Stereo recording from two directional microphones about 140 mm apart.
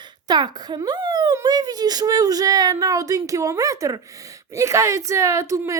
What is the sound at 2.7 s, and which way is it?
Speech, 25° right (ahead or behind).